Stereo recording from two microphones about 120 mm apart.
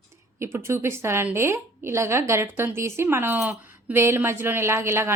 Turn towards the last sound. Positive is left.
turn(degrees=-20)  # may be behind; listen again after turning